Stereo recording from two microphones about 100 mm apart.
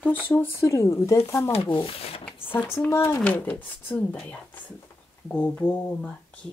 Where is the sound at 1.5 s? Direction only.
70° left (ahead or behind).